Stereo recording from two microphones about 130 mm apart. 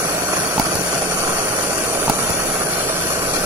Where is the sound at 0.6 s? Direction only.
30° right (ahead or behind).